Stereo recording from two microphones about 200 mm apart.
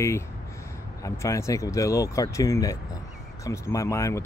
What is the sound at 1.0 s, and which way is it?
Speech, 15° left (ahead or behind).